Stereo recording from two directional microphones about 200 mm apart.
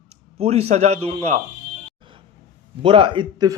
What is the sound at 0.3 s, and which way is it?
Speech, 30° right (ahead or behind).